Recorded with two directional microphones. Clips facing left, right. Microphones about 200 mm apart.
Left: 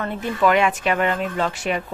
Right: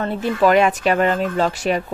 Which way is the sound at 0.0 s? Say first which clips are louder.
Right 3 dB; 35° right (ahead or behind).